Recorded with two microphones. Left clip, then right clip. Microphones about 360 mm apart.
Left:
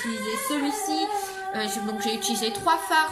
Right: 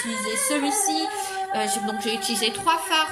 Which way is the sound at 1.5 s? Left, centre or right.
Centre.